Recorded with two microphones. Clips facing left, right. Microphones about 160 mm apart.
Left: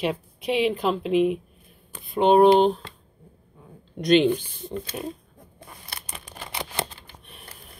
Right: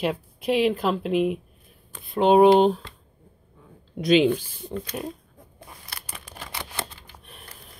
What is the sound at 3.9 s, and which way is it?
Speech, 5° right (ahead or behind).